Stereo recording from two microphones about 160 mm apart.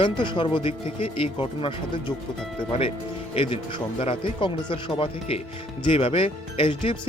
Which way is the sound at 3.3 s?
35° left (ahead or behind).